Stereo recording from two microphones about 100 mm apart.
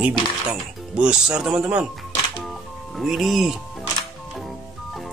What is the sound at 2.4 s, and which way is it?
Music, centre (ahead or behind).